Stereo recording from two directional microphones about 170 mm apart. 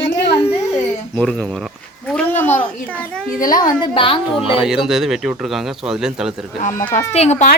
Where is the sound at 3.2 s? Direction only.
55° left (ahead or behind).